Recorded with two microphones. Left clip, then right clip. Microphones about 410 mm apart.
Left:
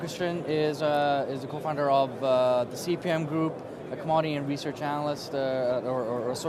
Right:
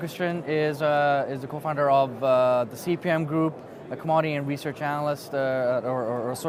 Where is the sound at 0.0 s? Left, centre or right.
Right.